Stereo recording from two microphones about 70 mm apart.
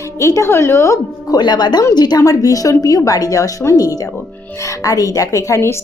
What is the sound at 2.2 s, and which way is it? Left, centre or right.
A woman's voice, left.